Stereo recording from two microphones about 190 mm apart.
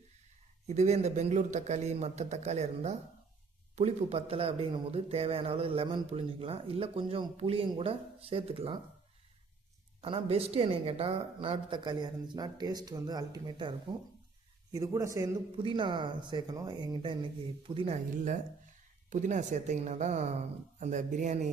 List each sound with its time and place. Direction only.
0.7 s speech: 35° right (ahead or behind)
10.0 s a man's voice: 30° right (ahead or behind)